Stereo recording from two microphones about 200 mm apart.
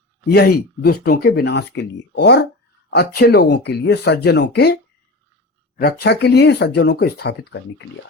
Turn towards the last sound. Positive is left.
turn(degrees=55)  # may be behind; listen again after turning